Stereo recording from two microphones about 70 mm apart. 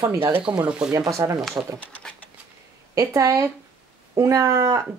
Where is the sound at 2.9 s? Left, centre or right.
Right.